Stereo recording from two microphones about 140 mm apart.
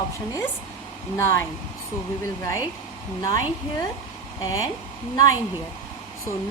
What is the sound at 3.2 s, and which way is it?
A woman's voice, 30° left (ahead or behind).